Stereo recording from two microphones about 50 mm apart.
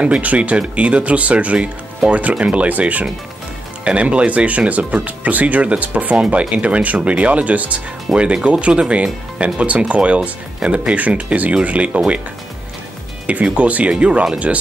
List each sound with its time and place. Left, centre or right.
0.0 s speech: right
13.3 s speech: right